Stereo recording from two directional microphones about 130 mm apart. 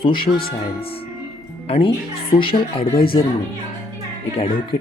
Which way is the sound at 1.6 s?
50° left (ahead or behind).